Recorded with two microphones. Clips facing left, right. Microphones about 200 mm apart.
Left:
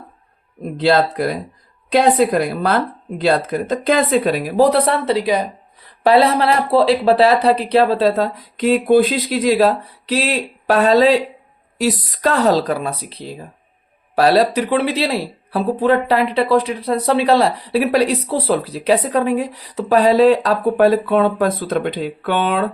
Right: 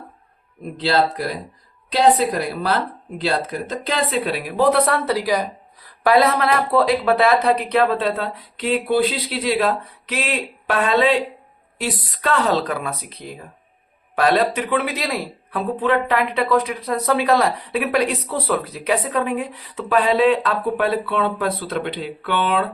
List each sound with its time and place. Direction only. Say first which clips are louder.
0.8 s speech: left 4 dB; 50° left (ahead or behind)